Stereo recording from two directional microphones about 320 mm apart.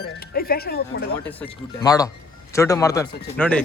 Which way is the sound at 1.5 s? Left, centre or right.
Centre.